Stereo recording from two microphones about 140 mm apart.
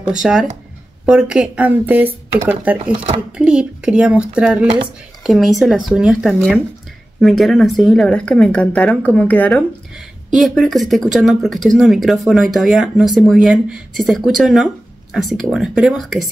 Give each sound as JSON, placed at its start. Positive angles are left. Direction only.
{"t": 0.1, "sound": "speech", "side_deg": -5}
{"t": 2.9, "sound": "speech", "side_deg": -40}
{"t": 3.3, "sound": "speech", "side_deg": -5}